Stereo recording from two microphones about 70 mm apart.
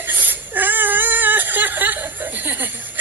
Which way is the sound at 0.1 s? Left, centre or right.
Right.